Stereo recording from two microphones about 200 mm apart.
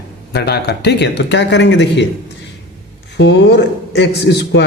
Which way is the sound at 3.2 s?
60° left (ahead or behind).